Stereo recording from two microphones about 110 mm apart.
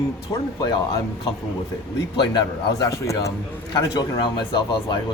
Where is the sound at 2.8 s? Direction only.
30° left (ahead or behind).